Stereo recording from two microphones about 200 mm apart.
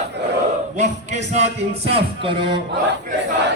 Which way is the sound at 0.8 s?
35° right (ahead or behind).